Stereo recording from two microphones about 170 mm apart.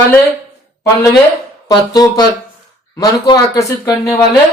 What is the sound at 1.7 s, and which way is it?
Speech, 25° left (ahead or behind).